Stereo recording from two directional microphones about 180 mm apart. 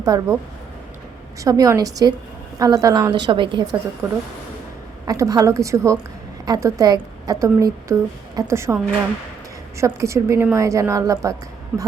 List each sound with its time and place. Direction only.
0.0 s a woman's voice: 20° right (ahead or behind)
1.5 s a woman's voice: 20° right (ahead or behind)
4.0 s a woman's voice: 15° right (ahead or behind)
11.7 s speech: centre (ahead or behind)